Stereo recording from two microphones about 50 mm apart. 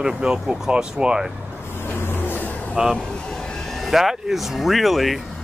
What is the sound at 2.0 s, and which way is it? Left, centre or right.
Vehicle, left.